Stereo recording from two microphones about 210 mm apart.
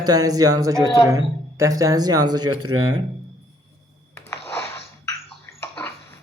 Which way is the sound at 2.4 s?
90° right.